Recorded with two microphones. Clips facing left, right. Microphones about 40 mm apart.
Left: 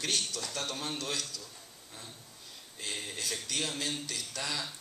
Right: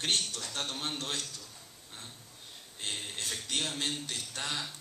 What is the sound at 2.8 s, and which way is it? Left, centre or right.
Speech, right.